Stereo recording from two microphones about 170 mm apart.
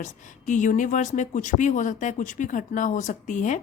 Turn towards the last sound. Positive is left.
turn(degrees=45)  # may be behind; listen again after turning